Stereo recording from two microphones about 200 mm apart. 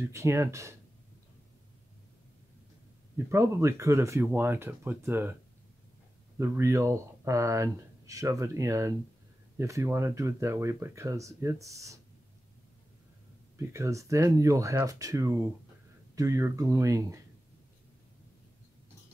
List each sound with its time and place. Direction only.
0.0 s speech: 15° right (ahead or behind)
3.3 s speech: 15° right (ahead or behind)
6.3 s speech: 15° right (ahead or behind)
13.6 s speech: 15° right (ahead or behind)